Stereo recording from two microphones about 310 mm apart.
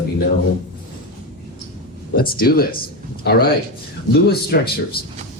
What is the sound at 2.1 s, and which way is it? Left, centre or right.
Speech, left.